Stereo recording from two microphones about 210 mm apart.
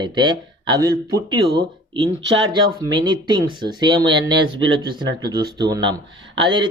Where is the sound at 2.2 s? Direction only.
65° right (ahead or behind).